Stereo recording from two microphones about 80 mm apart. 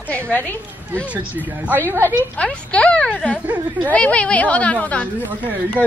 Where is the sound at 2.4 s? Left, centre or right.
Centre.